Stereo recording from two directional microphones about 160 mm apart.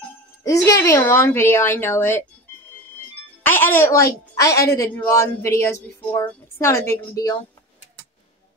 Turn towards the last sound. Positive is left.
turn(degrees=25)  # may be behind; listen again after turning